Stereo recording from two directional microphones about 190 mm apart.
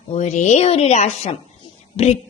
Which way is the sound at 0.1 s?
35° left (ahead or behind).